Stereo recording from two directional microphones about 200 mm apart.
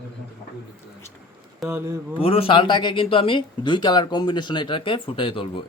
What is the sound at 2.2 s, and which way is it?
Speech, 30° left (ahead or behind).